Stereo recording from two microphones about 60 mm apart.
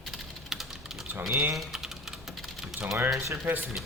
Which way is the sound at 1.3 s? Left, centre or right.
Right.